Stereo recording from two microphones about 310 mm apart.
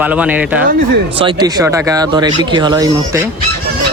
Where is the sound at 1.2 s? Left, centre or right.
Centre.